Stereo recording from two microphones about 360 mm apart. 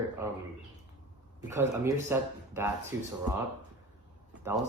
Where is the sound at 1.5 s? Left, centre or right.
Centre.